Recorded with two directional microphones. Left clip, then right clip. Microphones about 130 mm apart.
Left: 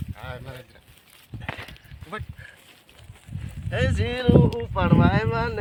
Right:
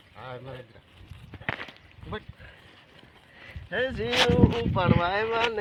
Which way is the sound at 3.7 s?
25° left (ahead or behind).